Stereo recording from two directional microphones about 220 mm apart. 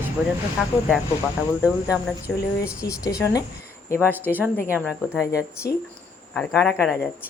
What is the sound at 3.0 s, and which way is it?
Speech, 15° left (ahead or behind).